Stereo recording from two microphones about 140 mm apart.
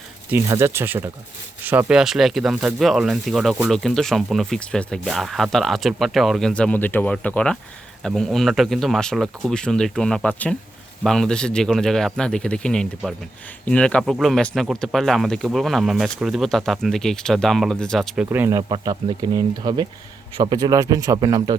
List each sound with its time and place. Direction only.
0.3 s speech: 20° right (ahead or behind); by 18.3 s centre (ahead or behind)
18.3 s a man's voice: 20° right (ahead or behind)
18.7 s a man's voice: 30° right (ahead or behind)